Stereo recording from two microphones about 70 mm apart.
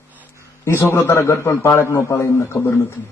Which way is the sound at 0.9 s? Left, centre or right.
Left.